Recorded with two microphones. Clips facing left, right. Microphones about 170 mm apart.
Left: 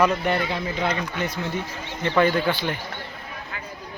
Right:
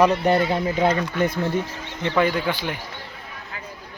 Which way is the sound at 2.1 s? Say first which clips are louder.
Left 1 dB; 10° right (ahead or behind).